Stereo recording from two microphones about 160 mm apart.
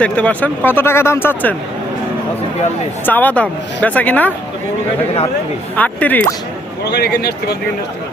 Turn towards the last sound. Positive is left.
turn(degrees=90)